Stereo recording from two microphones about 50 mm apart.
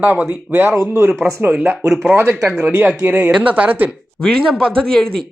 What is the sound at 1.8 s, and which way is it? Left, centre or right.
Speech, centre.